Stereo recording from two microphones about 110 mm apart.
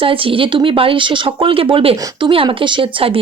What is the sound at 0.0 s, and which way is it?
Speech, 55° right (ahead or behind).